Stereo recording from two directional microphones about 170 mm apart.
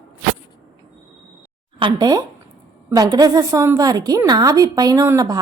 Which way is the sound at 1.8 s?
25° right (ahead or behind).